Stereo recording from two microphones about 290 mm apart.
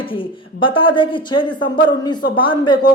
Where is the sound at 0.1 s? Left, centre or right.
Centre.